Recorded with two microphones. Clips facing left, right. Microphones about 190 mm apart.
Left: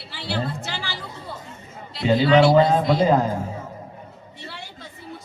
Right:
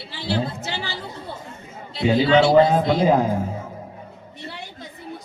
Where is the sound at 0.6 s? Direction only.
25° right (ahead or behind).